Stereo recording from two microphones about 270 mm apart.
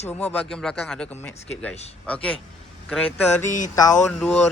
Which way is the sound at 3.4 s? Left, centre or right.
Left.